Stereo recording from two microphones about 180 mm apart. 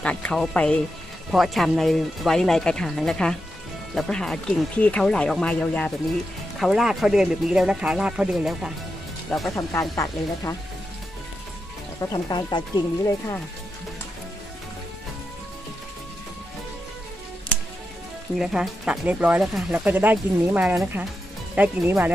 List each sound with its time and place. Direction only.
0.0 s speech: 5° left (ahead or behind)
9.6 s speech: 15° left (ahead or behind)
12.0 s speech: 20° left (ahead or behind)
18.4 s speech: 5° right (ahead or behind)